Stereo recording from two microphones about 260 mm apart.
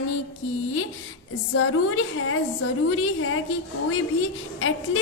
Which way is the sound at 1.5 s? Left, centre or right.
Left.